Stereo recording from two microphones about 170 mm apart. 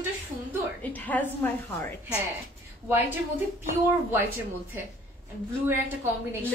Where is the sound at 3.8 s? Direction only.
15° right (ahead or behind).